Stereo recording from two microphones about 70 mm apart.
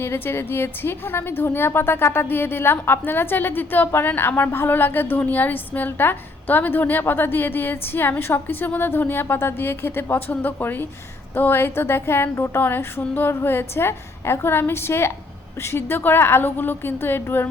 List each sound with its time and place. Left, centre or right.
0.0 s a woman's voice: left